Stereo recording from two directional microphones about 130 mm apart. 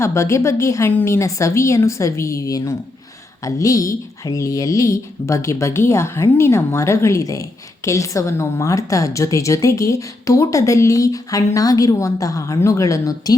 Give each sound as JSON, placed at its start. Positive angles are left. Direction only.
{"t": 0.0, "sound": "a woman's voice", "side_deg": 20}